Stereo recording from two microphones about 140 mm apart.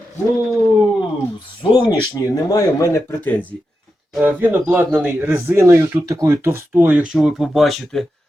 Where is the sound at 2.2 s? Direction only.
20° left (ahead or behind).